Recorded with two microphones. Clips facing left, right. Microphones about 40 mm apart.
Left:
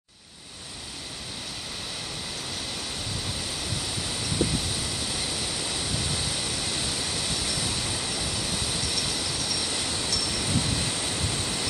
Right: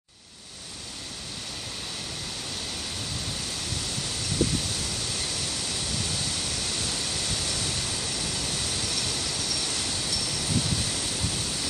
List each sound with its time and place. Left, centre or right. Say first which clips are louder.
4.0 s vehicle: even; centre
10.0 s train: left 2 dB; centre
10.4 s vehicle: even; centre